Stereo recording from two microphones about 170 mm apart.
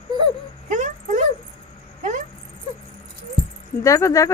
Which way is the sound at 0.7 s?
45° right (ahead or behind).